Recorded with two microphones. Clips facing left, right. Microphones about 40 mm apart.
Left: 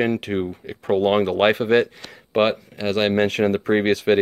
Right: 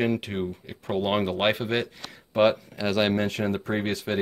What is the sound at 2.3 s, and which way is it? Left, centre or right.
Speech, left.